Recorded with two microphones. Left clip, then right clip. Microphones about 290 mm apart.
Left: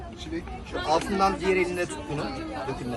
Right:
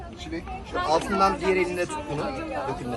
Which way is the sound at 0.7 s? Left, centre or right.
Centre.